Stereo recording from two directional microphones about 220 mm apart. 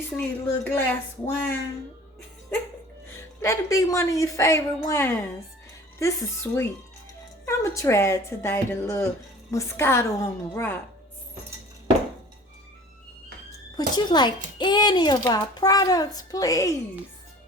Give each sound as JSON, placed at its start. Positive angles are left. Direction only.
{"t": 0.2, "sound": "a woman's voice", "side_deg": 5}
{"t": 3.4, "sound": "a woman's voice", "side_deg": 15}
{"t": 13.7, "sound": "speech", "side_deg": 20}